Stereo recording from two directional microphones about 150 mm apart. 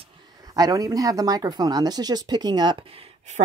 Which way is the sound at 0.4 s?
25° right (ahead or behind).